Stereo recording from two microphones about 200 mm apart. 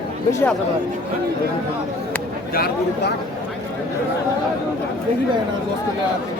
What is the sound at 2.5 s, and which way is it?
Speech, 50° left (ahead or behind).